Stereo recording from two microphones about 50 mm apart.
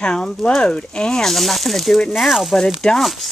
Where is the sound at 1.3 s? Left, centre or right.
Centre.